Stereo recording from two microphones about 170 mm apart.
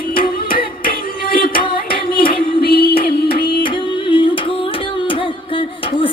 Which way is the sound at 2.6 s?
60° left (ahead or behind).